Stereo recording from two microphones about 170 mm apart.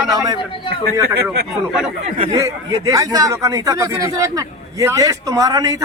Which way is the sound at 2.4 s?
20° right (ahead or behind).